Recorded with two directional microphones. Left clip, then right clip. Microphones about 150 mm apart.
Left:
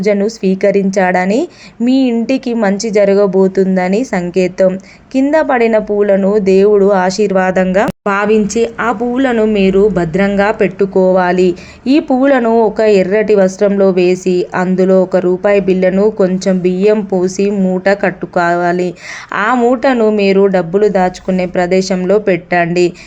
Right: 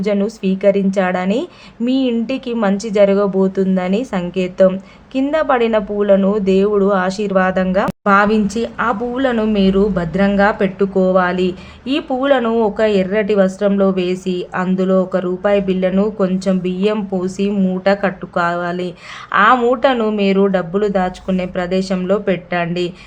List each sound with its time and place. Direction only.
0.0 s a woman's voice: 20° left (ahead or behind)
1.8 s speech: 40° right (ahead or behind)
2.2 s a woman's voice: 20° left (ahead or behind)